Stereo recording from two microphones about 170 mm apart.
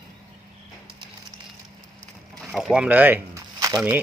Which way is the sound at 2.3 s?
Centre (ahead or behind).